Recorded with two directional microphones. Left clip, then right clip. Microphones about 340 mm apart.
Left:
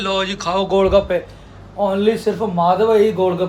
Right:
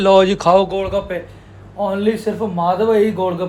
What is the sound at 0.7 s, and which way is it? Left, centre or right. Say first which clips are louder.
Speech: left 6 dB; centre.